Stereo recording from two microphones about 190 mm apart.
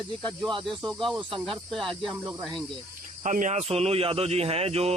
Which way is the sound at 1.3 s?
30° right (ahead or behind).